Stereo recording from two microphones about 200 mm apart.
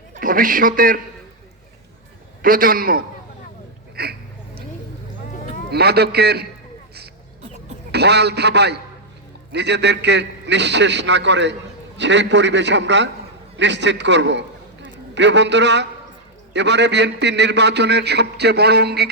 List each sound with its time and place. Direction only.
0.1 s a man's voice: 45° right (ahead or behind)
2.4 s a man's voice: 45° right (ahead or behind)
5.7 s a man's voice: 55° right (ahead or behind)
7.9 s a man's voice: 55° right (ahead or behind)